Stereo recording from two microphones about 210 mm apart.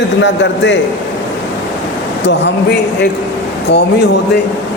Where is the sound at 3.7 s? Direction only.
50° left (ahead or behind).